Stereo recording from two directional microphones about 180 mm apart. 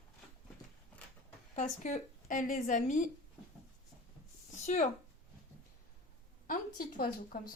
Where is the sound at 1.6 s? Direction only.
45° left (ahead or behind).